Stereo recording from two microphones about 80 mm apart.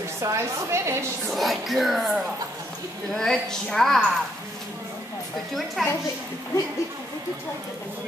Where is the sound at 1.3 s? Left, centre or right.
Centre.